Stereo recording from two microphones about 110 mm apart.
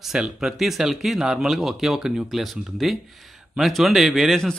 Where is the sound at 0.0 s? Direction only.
5° right (ahead or behind).